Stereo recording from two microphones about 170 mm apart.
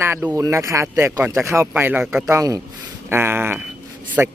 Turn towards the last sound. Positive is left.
turn(degrees=-10)  # may be behind; listen again after turning